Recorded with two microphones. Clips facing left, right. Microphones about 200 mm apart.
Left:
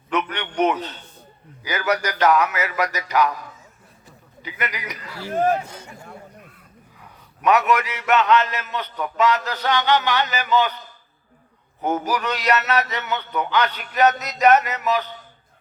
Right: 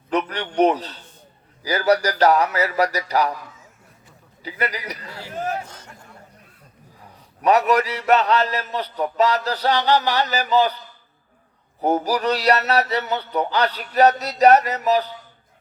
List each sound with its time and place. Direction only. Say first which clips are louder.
0.1 s a man's voice: right 2 dB; 35° right (ahead or behind)
4.4 s a man's voice: right 3 dB; 35° right (ahead or behind)
5.6 s a man's voice: left 4 dB; 10° left (ahead or behind)
7.4 s a man's voice: right 2 dB; 35° right (ahead or behind)
11.8 s a man's voice: right 3 dB; 35° right (ahead or behind)